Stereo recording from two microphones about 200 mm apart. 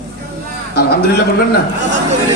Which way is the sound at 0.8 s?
55° left (ahead or behind).